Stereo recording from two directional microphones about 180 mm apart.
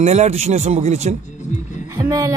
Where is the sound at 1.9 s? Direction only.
20° right (ahead or behind).